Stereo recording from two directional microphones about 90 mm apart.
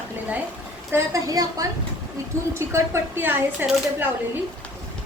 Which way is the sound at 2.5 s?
25° right (ahead or behind).